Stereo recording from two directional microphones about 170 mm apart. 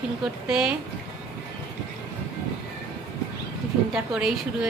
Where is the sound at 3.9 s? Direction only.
5° right (ahead or behind).